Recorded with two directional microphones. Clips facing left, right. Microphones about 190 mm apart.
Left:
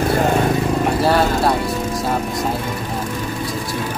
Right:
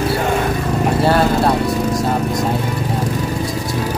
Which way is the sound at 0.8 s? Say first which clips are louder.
Right 4 dB; centre (ahead or behind).